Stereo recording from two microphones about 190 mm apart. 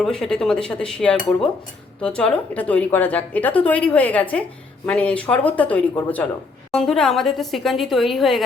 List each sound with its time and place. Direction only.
0.0 s a woman's voice: 5° left (ahead or behind)